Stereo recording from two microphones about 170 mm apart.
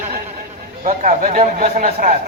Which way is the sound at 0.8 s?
50° right (ahead or behind).